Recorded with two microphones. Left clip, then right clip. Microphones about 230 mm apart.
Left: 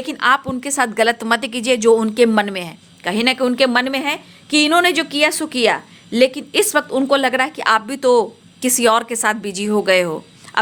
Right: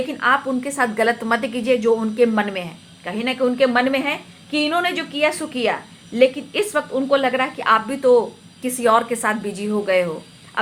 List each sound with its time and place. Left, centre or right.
0.1 s a woman's voice: left